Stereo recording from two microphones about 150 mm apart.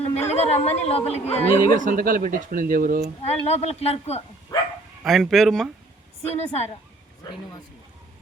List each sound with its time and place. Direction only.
0.0 s speech: 45° left (ahead or behind)
1.7 s speech: 65° right (ahead or behind)
3.2 s speech: 45° left (ahead or behind)
4.5 s bow-wow: 25° left (ahead or behind)
5.0 s speech: centre (ahead or behind)
6.2 s speech: 45° left (ahead or behind)